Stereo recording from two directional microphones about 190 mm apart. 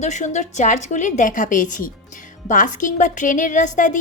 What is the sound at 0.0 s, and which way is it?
A woman's voice, 40° left (ahead or behind).